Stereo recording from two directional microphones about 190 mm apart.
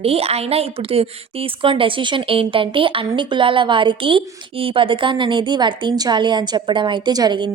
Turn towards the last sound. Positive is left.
turn(degrees=-20)  # may be behind; listen again after turning